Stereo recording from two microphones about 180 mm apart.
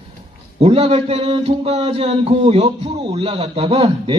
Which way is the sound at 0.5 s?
30° right (ahead or behind).